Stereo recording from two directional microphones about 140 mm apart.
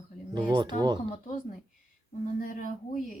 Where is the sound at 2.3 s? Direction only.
75° left (ahead or behind).